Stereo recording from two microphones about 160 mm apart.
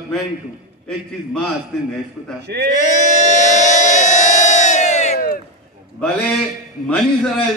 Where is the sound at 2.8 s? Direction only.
50° left (ahead or behind).